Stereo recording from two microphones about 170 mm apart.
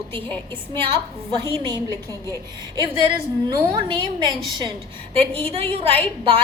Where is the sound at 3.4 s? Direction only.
25° right (ahead or behind).